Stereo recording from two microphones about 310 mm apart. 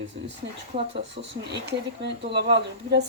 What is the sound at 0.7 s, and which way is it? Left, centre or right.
Speech, centre.